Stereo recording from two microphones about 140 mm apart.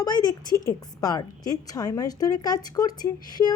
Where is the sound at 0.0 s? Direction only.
30° left (ahead or behind).